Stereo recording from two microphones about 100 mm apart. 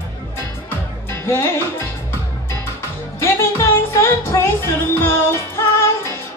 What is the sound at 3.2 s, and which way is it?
Music, 25° left (ahead or behind).